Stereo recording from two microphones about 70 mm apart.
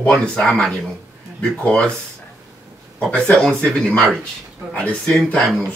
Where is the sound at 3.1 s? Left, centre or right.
Centre.